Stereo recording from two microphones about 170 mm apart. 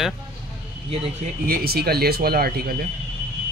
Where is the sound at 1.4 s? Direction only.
60° right (ahead or behind).